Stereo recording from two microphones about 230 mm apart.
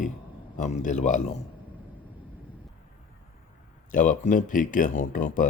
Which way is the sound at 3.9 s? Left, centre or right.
Left.